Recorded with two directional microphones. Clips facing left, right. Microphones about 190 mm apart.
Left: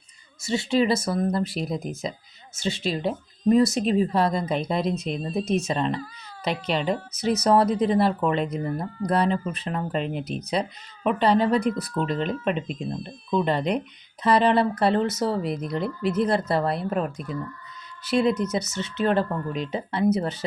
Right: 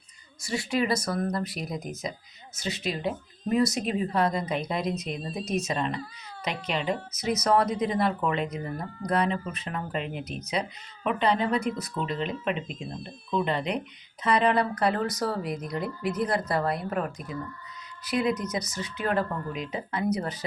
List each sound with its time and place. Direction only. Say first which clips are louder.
0.4 s speech: left 5 dB; 25° left (ahead or behind)
18.0 s speech: left 5 dB; 30° left (ahead or behind)